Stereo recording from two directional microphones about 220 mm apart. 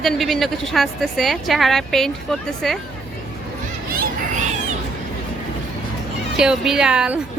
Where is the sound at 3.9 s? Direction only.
40° right (ahead or behind).